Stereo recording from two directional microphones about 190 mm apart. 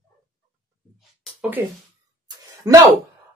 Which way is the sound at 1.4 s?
10° right (ahead or behind).